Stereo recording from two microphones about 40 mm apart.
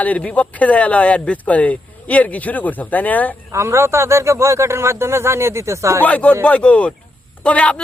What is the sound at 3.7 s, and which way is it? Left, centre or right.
Speech, right.